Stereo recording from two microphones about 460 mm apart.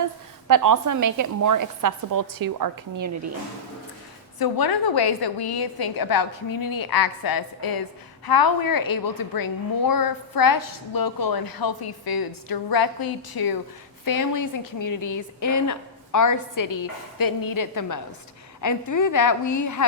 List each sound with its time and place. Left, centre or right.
0.0 s a woman's voice: right
4.4 s a woman's voice: left